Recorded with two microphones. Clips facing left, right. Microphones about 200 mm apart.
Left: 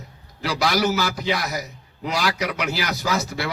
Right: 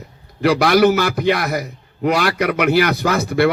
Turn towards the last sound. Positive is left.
turn(degrees=-55)  # may be behind; listen again after turning